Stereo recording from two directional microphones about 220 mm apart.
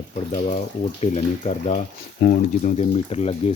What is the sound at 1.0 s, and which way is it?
Speech, 30° left (ahead or behind).